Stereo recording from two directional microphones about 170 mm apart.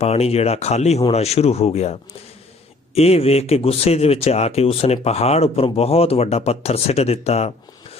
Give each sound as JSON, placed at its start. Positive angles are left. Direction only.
{"t": 0.0, "sound": "speech", "side_deg": 35}